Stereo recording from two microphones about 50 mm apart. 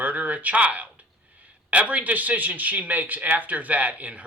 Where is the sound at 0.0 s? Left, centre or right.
Right.